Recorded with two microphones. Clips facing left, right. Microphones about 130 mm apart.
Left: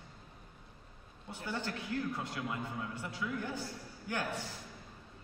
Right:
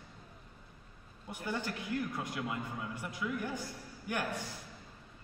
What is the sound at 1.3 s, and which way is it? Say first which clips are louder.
A man's voice: right 1 dB; 15° right (ahead or behind).